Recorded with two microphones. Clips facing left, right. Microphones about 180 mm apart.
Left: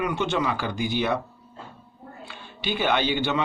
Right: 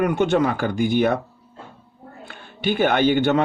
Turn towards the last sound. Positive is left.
turn(degrees=-50)  # may be behind; listen again after turning